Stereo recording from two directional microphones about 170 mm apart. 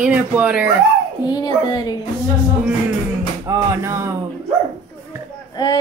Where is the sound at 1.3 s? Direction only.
25° left (ahead or behind).